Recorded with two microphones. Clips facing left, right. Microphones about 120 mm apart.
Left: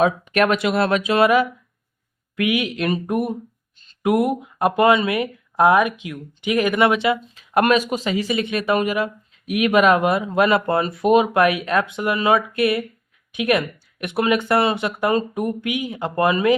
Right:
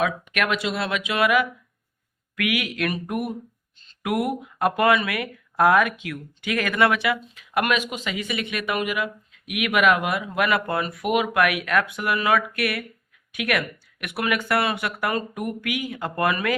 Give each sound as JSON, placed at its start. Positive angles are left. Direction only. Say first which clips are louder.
{"t": 0.0, "sound": "speech", "louder": "left 7 dB", "side_deg": 35}
{"t": 0.6, "sound": "speech", "louder": "left 7 dB", "side_deg": 50}